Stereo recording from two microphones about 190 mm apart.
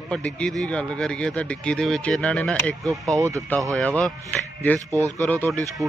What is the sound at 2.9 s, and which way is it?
Speech, 15° right (ahead or behind).